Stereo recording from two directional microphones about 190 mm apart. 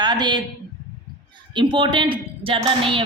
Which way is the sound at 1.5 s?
25° right (ahead or behind).